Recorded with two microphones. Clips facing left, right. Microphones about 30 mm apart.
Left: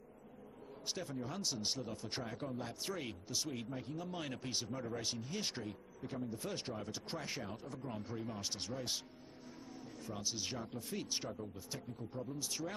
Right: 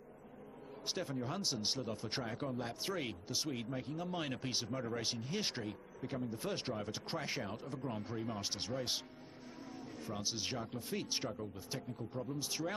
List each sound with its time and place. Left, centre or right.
0.8 s speech: centre
10.0 s speech: centre